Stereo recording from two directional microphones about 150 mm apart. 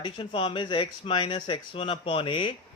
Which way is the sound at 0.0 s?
35° left (ahead or behind).